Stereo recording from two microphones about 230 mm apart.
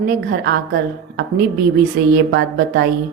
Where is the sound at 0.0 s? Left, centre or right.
Right.